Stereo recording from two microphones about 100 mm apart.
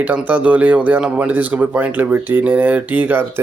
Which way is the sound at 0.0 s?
15° right (ahead or behind).